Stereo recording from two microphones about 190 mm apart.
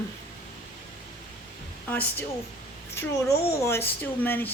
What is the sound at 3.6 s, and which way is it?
Speech, 15° left (ahead or behind).